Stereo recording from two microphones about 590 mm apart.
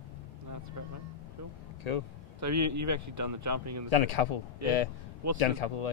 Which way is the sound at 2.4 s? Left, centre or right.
Right.